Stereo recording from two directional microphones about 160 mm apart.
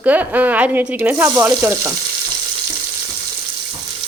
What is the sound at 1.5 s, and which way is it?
Frying, 20° right (ahead or behind).